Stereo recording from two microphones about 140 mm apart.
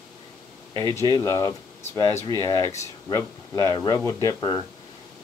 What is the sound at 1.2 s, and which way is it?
Speech, 20° left (ahead or behind).